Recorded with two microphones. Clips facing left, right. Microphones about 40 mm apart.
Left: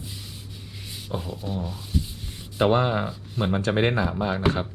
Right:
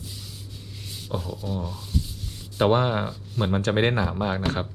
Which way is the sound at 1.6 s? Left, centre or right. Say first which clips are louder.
Left 1 dB; centre.